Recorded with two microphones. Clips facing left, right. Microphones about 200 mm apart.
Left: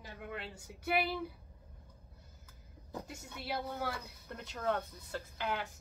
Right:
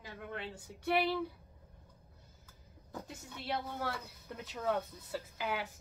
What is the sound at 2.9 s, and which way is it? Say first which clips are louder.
A woman's voice: left 1 dB; 10° left (ahead or behind).